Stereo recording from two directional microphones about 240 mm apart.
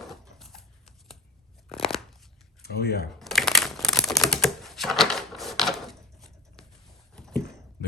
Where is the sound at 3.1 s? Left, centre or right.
Centre.